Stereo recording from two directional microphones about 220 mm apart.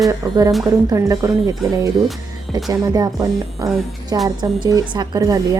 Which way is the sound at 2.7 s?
15° right (ahead or behind).